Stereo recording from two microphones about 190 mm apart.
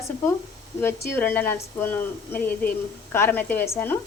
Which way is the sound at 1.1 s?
10° left (ahead or behind).